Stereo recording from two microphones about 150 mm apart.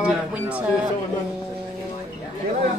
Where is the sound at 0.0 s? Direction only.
10° right (ahead or behind).